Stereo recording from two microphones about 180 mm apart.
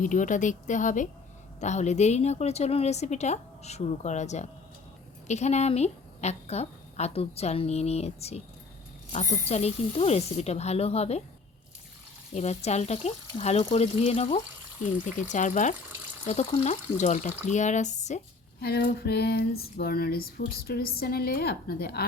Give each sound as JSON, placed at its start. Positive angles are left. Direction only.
{"t": 0.0, "sound": "a woman's voice", "side_deg": 45}
{"t": 12.3, "sound": "a woman's voice", "side_deg": 35}
{"t": 15.0, "sound": "a woman's voice", "side_deg": 45}
{"t": 18.6, "sound": "a sound", "side_deg": 55}